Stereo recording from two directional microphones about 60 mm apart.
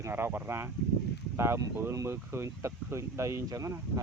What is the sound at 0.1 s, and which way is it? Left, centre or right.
Speech, right.